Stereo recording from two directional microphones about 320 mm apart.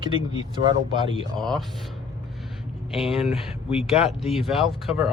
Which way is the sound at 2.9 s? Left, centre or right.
Centre.